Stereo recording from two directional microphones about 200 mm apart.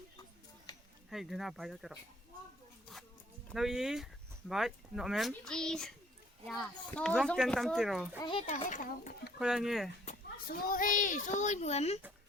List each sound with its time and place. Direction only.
0.7 s a sound: 20° left (ahead or behind)
1.1 s speech: centre (ahead or behind)
3.5 s speech: centre (ahead or behind)
8.2 s a child's voice: 25° left (ahead or behind)
9.4 s speech: 5° right (ahead or behind)
10.1 s a child's voice: 45° left (ahead or behind)